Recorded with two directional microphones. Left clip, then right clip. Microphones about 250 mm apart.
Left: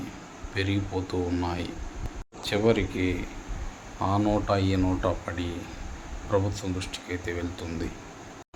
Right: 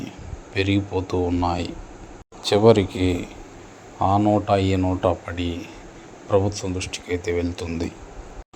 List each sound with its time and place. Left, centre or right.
0.5 s speech: right